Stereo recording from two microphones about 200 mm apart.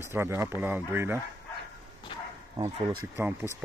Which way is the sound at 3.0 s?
10° right (ahead or behind).